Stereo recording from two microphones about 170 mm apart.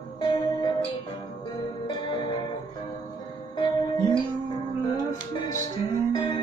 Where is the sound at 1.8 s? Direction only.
30° left (ahead or behind).